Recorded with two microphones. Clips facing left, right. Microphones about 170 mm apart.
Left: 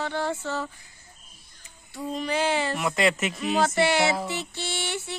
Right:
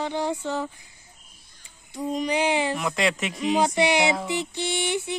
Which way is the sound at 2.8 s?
Centre (ahead or behind).